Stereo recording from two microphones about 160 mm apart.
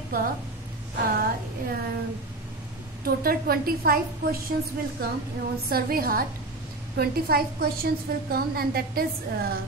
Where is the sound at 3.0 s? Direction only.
65° right (ahead or behind).